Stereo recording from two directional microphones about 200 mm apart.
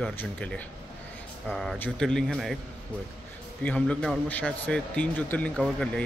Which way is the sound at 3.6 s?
5° left (ahead or behind).